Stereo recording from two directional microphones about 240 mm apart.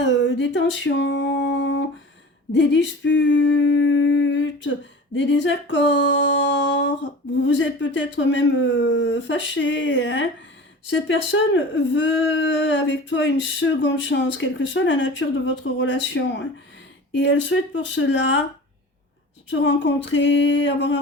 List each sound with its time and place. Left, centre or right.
0.0 s a sound: left
2.5 s speech: left
19.5 s speech: left